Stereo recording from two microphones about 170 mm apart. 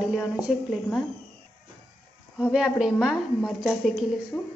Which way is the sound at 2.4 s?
5° right (ahead or behind).